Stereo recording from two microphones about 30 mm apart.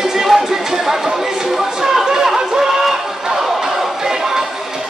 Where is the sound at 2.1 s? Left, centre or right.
Centre.